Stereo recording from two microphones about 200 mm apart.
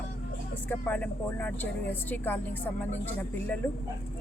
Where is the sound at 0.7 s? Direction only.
10° left (ahead or behind).